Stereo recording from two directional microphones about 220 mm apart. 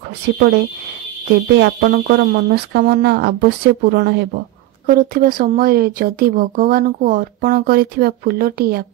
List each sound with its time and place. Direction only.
1.6 s speech: 40° right (ahead or behind)